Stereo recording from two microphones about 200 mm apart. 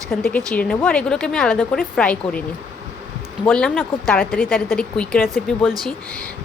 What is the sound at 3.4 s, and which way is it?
Speech, 5° left (ahead or behind).